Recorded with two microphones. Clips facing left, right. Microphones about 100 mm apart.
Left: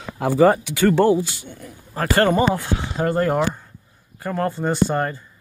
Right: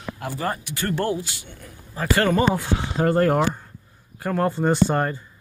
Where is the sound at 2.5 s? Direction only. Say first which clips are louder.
Even; centre (ahead or behind).